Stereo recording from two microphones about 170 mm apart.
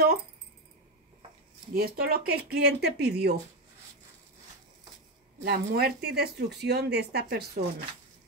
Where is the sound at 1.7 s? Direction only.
65° right (ahead or behind).